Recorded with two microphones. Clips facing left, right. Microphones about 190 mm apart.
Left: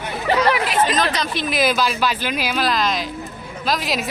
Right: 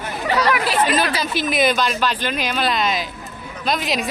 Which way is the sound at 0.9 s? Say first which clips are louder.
Right 1 dB; 10° right (ahead or behind).